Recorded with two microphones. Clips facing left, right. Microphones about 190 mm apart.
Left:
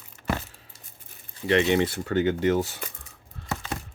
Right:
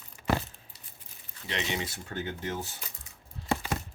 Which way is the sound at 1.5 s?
60° left (ahead or behind).